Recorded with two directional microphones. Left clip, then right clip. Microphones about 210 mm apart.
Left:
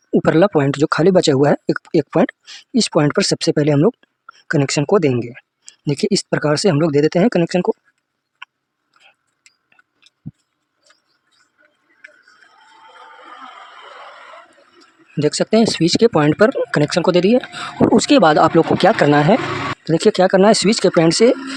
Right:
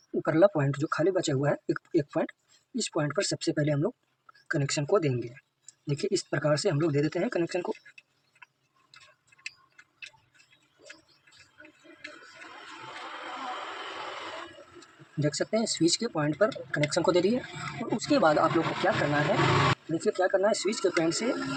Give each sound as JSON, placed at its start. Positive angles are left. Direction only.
{"t": 0.2, "sound": "speech", "side_deg": 50}
{"t": 15.2, "sound": "speech", "side_deg": 55}
{"t": 17.0, "sound": "speech", "side_deg": 40}
{"t": 17.9, "sound": "speech", "side_deg": 50}